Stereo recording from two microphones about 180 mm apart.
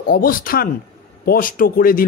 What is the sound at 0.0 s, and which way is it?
A man's voice, 55° left (ahead or behind).